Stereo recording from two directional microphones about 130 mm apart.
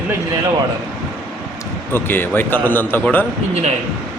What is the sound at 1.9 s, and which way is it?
A man's voice, 15° left (ahead or behind).